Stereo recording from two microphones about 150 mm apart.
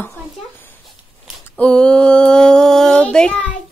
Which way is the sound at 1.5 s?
5° left (ahead or behind).